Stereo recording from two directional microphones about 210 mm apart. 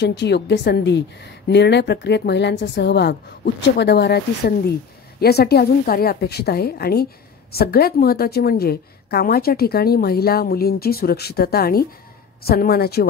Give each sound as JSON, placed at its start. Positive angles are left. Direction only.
{"t": 0.0, "sound": "a woman's voice", "side_deg": 55}